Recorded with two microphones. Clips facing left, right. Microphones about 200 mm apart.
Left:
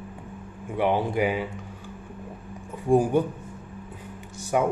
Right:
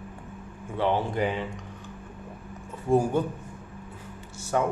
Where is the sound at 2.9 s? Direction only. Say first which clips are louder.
Left 3 dB; 15° left (ahead or behind).